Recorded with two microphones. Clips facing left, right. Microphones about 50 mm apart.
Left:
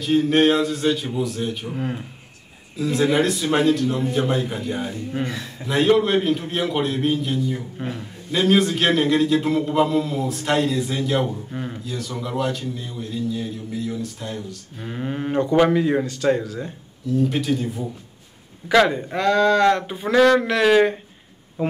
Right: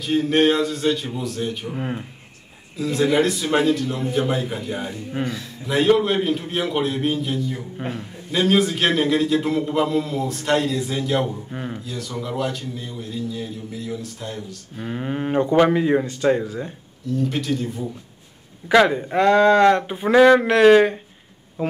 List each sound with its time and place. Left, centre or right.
0.0 s a man's voice: centre
1.8 s speech: centre
2.8 s a man's voice: centre
11.5 s a man's voice: centre
17.2 s a man's voice: centre
18.7 s speech: centre
19.1 s speech: right
20.6 s a man's voice: centre